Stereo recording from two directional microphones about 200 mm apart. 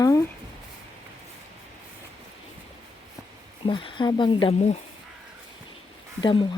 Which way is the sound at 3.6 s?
25° left (ahead or behind).